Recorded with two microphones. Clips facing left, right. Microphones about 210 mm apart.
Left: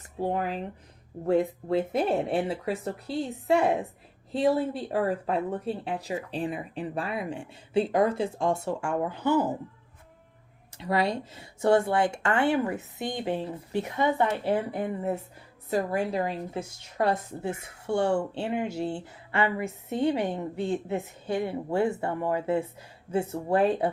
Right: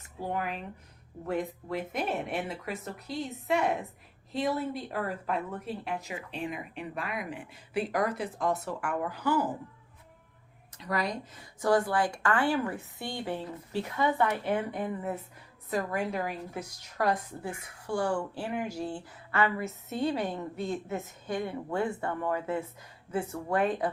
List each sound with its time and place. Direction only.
0.2 s speech: 30° left (ahead or behind)
10.8 s speech: 30° left (ahead or behind)
20.7 s speech: 30° left (ahead or behind)